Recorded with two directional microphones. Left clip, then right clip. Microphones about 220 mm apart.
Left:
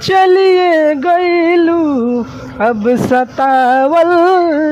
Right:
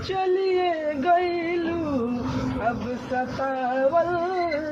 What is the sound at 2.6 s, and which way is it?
Music, 60° left (ahead or behind).